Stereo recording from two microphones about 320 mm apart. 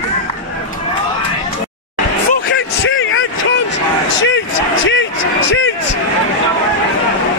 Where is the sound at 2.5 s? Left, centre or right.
Left.